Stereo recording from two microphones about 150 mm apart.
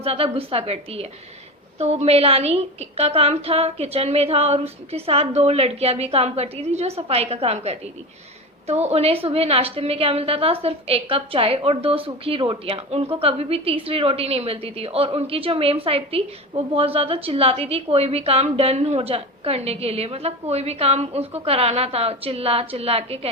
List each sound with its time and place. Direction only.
0.0 s a woman's voice: 40° right (ahead or behind)